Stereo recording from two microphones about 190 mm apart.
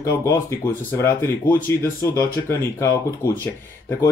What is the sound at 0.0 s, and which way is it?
Speech, 15° left (ahead or behind).